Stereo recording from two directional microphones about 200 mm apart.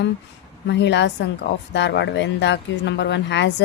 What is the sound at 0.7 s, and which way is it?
A woman's voice, 60° left (ahead or behind).